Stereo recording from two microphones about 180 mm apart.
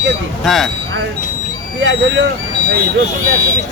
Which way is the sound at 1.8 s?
85° right.